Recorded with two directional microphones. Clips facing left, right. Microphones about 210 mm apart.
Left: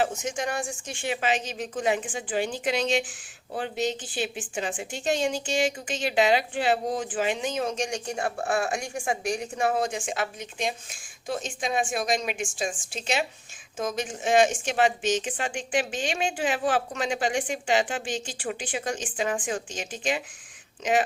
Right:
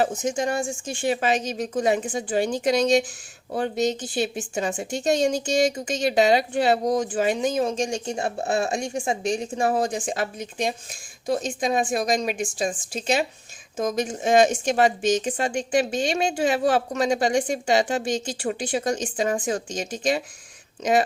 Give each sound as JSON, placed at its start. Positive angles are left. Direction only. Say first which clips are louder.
{"t": 0.0, "sound": "speech", "louder": "right 4 dB", "side_deg": -35}
{"t": 1.0, "sound": "speech", "louder": "right 5 dB", "side_deg": -40}
{"t": 9.6, "sound": "speech", "louder": "right 2 dB", "side_deg": -40}